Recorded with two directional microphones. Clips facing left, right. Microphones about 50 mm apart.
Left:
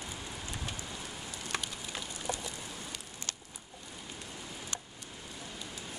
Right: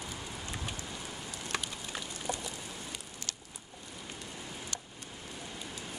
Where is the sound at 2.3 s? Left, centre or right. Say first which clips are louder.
Even; centre.